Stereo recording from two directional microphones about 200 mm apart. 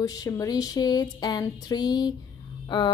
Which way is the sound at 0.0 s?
20° left (ahead or behind).